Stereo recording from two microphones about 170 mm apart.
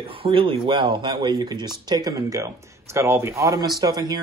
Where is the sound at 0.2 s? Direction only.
30° right (ahead or behind).